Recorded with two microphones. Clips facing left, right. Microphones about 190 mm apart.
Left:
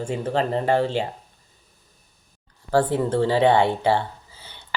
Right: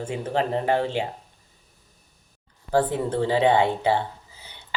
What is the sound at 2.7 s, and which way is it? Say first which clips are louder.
Speech: left 2 dB; 15° right (ahead or behind).